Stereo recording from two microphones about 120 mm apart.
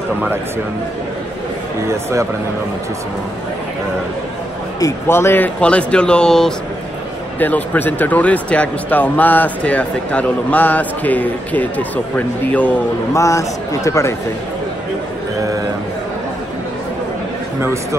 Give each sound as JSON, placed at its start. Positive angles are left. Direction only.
{"t": 1.9, "sound": "speech", "side_deg": -25}
{"t": 4.7, "sound": "speech", "side_deg": 25}
{"t": 13.1, "sound": "a man's voice", "side_deg": 25}